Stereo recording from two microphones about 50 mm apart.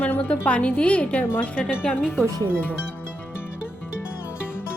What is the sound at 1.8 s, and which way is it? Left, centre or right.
Speech, centre.